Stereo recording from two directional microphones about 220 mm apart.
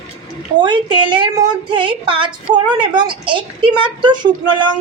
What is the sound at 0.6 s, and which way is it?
A woman's voice, 20° right (ahead or behind).